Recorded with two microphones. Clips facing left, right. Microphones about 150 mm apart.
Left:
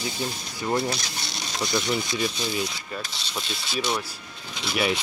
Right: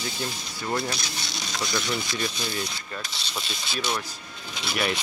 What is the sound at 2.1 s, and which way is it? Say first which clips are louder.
Speech: left 3 dB; 10° left (ahead or behind).